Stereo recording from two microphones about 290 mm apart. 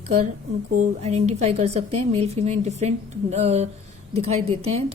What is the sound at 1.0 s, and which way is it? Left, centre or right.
A woman's voice, right.